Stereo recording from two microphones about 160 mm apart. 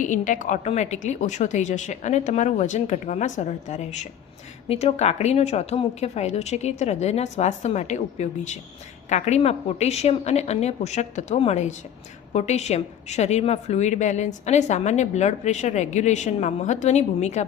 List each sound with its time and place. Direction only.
0.0 s a woman's voice: 55° left (ahead or behind)